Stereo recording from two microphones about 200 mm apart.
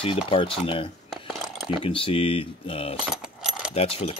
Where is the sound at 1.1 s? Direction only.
Centre (ahead or behind).